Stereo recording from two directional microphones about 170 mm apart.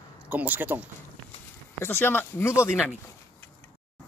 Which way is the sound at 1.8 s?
15° left (ahead or behind).